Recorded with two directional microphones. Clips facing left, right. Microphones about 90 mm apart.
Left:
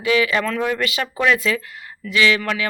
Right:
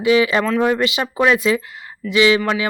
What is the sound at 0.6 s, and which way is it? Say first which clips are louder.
Speech: right 4 dB; 20° right (ahead or behind).